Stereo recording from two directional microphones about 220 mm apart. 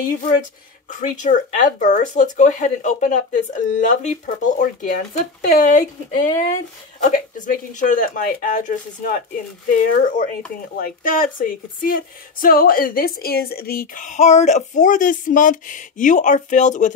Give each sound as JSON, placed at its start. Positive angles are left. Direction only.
{"t": 0.8, "sound": "speech", "side_deg": 35}
{"t": 7.0, "sound": "speech", "side_deg": 35}